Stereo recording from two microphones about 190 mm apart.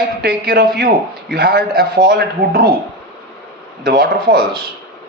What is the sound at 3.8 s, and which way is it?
Speech, 55° right (ahead or behind).